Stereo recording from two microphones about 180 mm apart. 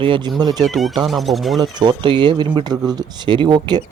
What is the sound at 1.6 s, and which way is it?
Speech, 25° right (ahead or behind).